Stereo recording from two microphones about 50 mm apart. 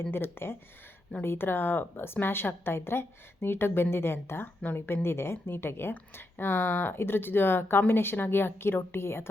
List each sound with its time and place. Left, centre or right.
0.0 s speech: left